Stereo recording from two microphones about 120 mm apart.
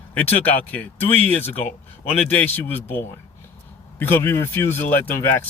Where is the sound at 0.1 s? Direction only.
15° left (ahead or behind).